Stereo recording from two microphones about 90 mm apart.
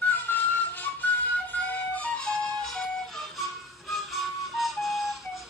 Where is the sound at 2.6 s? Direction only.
5° left (ahead or behind).